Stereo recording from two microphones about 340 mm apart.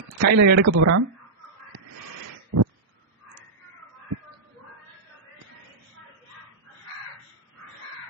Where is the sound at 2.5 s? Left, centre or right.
Right.